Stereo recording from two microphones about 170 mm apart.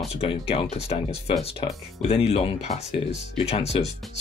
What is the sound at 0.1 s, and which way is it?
Speech, 35° left (ahead or behind).